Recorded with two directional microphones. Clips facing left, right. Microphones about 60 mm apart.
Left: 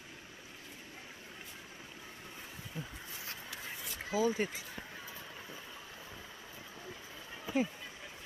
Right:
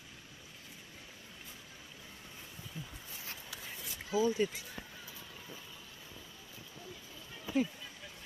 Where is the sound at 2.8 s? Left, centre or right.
Left.